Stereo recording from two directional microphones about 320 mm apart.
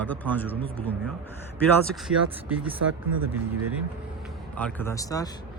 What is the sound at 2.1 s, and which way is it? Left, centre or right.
Speech, right.